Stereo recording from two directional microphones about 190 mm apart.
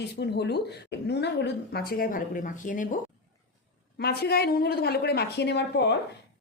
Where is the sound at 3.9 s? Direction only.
55° left (ahead or behind).